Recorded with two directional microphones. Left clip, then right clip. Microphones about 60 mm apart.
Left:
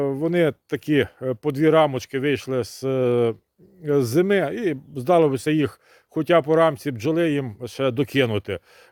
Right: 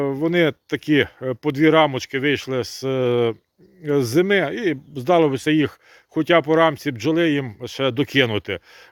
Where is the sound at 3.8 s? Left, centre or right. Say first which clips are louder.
Right 1 dB; left.